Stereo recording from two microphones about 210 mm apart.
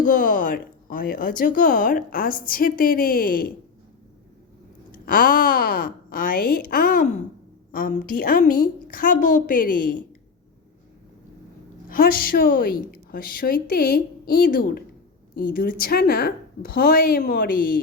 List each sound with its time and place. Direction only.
0.0 s speech: 40° left (ahead or behind)
4.9 s a woman's voice: 40° left (ahead or behind)
11.9 s a woman's voice: 45° left (ahead or behind)